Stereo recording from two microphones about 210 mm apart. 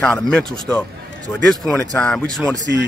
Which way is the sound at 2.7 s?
50° right (ahead or behind).